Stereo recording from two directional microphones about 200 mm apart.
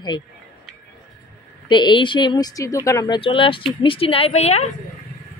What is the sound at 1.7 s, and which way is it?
A woman's voice, 25° left (ahead or behind).